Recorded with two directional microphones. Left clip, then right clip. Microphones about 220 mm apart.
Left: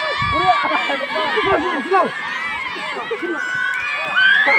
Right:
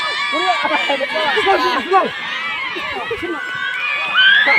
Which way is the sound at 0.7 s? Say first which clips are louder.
Right 2 dB; 50° left (ahead or behind).